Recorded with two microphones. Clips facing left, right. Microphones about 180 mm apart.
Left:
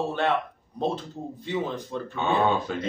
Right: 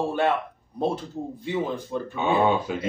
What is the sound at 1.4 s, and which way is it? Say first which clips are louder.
A man's voice: right 1 dB; 10° right (ahead or behind).